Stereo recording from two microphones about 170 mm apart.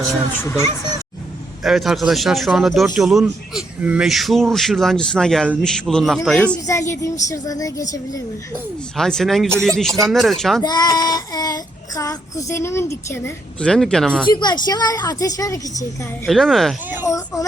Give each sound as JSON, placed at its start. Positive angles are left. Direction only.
{"t": 1.6, "sound": "a man's voice", "side_deg": 0}
{"t": 6.7, "sound": "a woman's voice", "side_deg": 20}
{"t": 9.0, "sound": "a man's voice", "side_deg": 5}
{"t": 10.6, "sound": "child singing", "side_deg": 25}
{"t": 14.3, "sound": "a woman's voice", "side_deg": 25}
{"t": 16.2, "sound": "a man's voice", "side_deg": 0}
{"t": 17.1, "sound": "a woman's voice", "side_deg": 20}